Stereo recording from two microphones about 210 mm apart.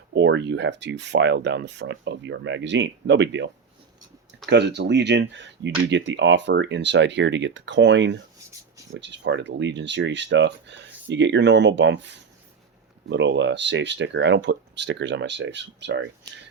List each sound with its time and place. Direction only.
0.1 s speech: 55° right (ahead or behind)